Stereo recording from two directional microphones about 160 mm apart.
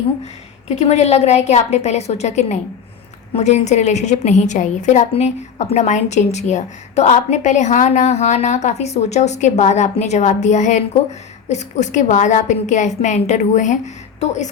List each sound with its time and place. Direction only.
0.8 s a woman's voice: 45° left (ahead or behind)